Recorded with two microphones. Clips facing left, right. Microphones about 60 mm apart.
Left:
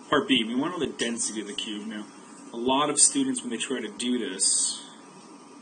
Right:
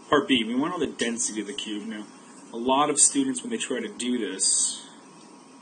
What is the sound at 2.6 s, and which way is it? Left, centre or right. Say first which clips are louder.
Speech: right 2 dB; centre.